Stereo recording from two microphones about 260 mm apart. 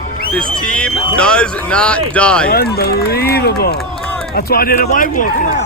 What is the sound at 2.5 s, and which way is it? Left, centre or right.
Speech, left.